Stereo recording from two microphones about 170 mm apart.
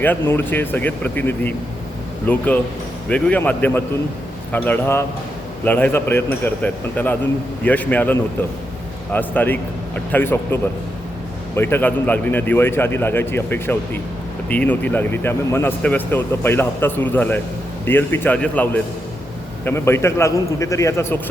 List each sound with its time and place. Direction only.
0.0 s speech: 10° left (ahead or behind)